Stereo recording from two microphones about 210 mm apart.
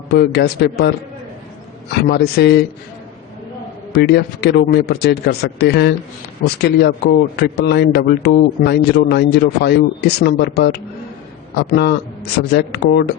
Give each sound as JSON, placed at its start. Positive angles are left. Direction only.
{"t": 0.1, "sound": "speech", "side_deg": 50}
{"t": 2.0, "sound": "speech", "side_deg": 55}
{"t": 3.9, "sound": "speech", "side_deg": 50}